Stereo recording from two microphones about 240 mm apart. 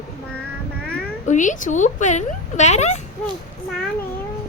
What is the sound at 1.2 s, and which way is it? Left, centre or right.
Speech, left.